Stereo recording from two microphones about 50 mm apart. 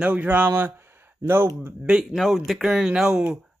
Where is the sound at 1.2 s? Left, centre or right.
Right.